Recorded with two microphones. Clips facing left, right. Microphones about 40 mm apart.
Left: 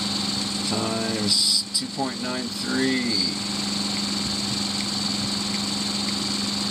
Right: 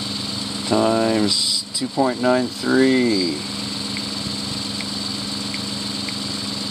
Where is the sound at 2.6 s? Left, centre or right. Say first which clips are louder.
Right 7 dB; right.